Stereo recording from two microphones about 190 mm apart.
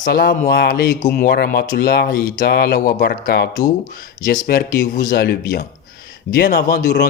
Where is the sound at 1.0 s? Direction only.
45° left (ahead or behind).